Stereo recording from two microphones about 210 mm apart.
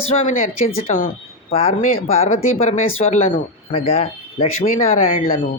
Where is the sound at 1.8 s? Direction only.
40° left (ahead or behind).